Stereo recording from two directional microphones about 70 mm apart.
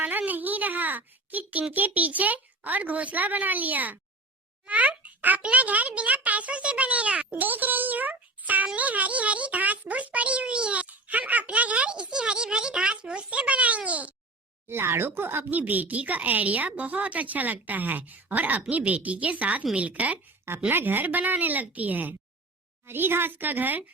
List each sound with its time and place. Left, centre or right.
0.3 s a child's voice: right
14.7 s a child's voice: right